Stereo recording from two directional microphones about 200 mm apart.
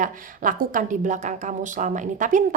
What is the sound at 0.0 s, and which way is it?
Speech, 40° right (ahead or behind).